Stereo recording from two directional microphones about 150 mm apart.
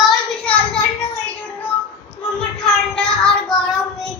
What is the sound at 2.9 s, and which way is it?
Speech, 5° left (ahead or behind).